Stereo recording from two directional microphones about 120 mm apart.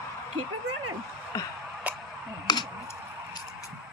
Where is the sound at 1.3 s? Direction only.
30° left (ahead or behind).